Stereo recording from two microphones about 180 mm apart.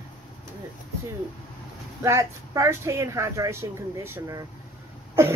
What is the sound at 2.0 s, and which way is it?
Speech, 15° right (ahead or behind).